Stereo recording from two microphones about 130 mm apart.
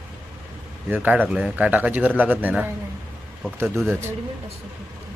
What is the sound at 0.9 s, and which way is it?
A man's voice, 15° right (ahead or behind).